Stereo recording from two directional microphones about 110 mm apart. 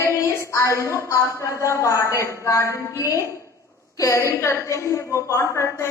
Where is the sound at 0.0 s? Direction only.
30° left (ahead or behind).